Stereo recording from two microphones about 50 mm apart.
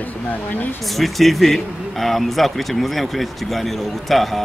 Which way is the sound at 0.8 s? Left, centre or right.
Centre.